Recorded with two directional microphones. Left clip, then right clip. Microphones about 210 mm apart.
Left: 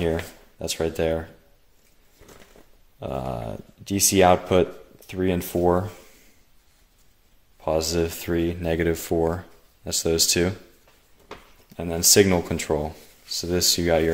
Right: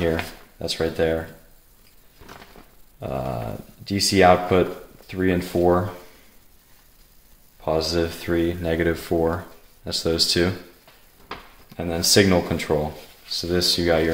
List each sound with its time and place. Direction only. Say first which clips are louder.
0.6 s speech: right 2 dB; 45° left (ahead or behind)
3.0 s speech: right 2 dB; 45° left (ahead or behind)
7.6 s speech: right 1 dB; 45° left (ahead or behind)
11.7 s speech: even; 50° left (ahead or behind)